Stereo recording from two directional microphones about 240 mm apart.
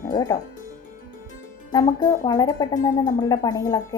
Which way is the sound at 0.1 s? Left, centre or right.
Centre.